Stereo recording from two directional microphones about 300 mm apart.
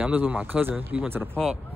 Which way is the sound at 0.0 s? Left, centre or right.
Centre.